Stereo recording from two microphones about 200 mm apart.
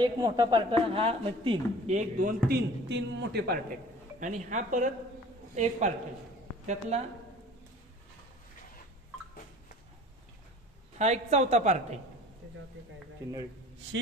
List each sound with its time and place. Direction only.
0.0 s a woman's voice: 20° right (ahead or behind)
2.0 s a man's voice: 45° right (ahead or behind)
4.2 s a woman's voice: 40° right (ahead or behind)
11.0 s a woman's voice: 35° right (ahead or behind)